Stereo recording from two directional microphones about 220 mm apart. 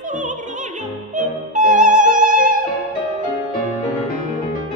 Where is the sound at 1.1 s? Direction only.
35° right (ahead or behind).